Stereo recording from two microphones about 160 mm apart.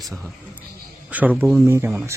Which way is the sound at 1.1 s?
10° right (ahead or behind).